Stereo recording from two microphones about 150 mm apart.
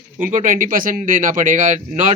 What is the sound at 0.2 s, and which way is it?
Speech, 65° right (ahead or behind).